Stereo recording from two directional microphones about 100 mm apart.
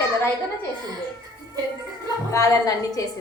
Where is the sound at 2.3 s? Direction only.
35° left (ahead or behind).